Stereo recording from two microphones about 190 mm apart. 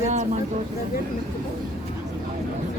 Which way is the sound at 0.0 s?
40° right (ahead or behind).